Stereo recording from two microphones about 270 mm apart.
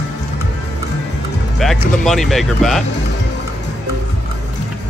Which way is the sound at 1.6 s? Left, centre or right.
Centre.